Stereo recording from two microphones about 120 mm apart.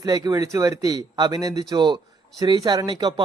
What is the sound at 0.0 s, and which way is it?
Speech, 30° right (ahead or behind).